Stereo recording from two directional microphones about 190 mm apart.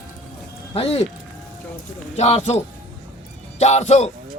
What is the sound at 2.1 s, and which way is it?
Speech, 35° left (ahead or behind).